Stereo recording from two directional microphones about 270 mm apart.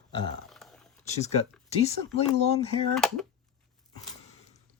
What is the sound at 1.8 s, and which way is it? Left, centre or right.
Speech, left.